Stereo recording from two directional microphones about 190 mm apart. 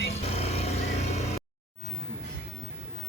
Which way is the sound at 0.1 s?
35° left (ahead or behind).